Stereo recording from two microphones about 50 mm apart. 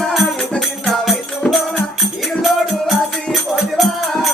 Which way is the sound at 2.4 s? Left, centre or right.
Centre.